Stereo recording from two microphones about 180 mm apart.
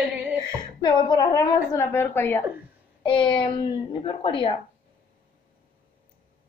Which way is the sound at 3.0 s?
30° left (ahead or behind).